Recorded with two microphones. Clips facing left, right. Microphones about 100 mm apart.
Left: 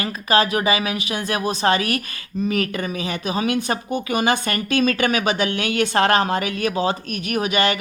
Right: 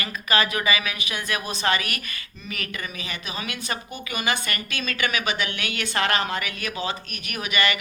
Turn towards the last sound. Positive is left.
turn(degrees=30)  # may be behind; listen again after turning